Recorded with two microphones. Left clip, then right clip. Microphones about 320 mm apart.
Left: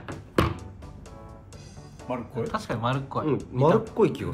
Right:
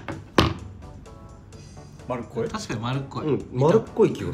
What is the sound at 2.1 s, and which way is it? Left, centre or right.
Speech, right.